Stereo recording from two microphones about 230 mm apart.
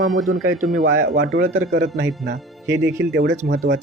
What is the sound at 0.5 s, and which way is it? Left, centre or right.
Speech, right.